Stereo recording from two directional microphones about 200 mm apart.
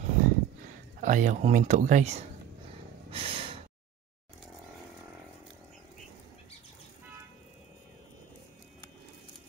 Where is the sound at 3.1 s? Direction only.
30° right (ahead or behind).